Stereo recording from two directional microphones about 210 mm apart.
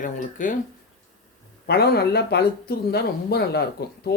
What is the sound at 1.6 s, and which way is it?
Speech, 50° left (ahead or behind).